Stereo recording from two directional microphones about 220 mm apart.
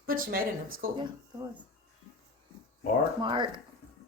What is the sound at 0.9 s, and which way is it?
Speech, 20° right (ahead or behind).